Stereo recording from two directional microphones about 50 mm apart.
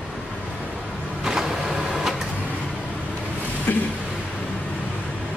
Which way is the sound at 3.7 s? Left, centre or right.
Left.